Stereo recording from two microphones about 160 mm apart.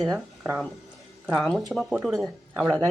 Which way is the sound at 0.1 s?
15° right (ahead or behind).